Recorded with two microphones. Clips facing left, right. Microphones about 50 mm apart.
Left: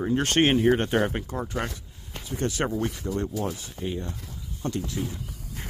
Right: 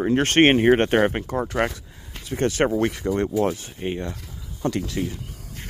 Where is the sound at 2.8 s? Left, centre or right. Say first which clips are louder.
Right 6 dB; right.